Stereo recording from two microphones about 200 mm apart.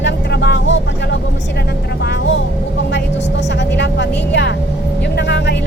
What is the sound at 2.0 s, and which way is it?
Vehicle, 60° left (ahead or behind).